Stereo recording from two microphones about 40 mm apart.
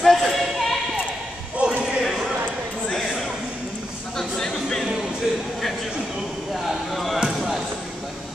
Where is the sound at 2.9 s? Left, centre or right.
Centre.